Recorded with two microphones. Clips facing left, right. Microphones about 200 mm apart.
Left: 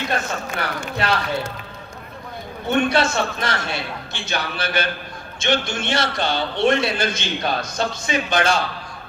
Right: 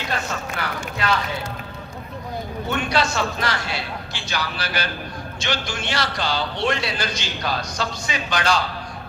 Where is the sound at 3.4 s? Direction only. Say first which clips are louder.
Left 1 dB; 25° left (ahead or behind).